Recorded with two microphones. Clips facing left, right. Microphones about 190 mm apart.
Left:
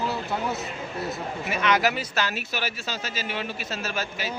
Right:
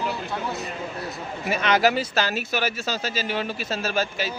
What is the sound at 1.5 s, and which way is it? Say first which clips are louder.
A man's voice: right 3 dB; 30° right (ahead or behind).